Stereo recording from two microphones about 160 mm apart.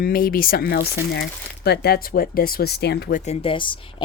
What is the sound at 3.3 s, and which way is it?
Speech, 35° left (ahead or behind).